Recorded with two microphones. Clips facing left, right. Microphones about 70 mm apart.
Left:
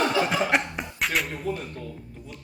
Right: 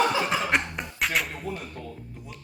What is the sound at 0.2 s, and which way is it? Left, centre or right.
Cough, centre.